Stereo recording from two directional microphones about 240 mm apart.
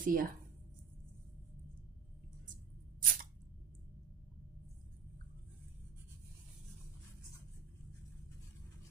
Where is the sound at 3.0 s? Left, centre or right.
Right.